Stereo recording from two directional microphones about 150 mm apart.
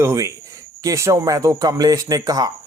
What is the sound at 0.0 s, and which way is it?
A man's voice, 20° right (ahead or behind).